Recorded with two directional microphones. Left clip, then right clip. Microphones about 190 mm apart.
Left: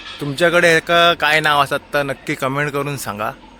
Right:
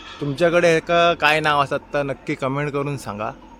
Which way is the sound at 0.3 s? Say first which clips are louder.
Left 3 dB; 5° left (ahead or behind).